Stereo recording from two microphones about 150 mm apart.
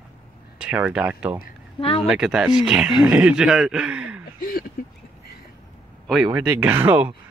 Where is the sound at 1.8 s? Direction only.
40° left (ahead or behind).